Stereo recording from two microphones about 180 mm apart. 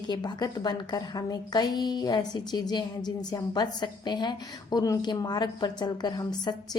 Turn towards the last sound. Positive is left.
turn(degrees=25)  # may be behind; listen again after turning